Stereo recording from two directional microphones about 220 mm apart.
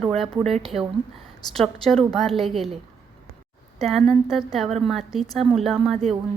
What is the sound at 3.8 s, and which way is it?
Speech, 25° right (ahead or behind).